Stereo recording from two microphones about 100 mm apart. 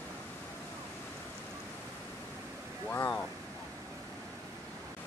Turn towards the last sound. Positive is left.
turn(degrees=20)  # may be behind; listen again after turning